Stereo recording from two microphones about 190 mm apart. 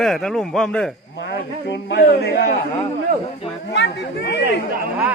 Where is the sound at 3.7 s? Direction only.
65° left (ahead or behind).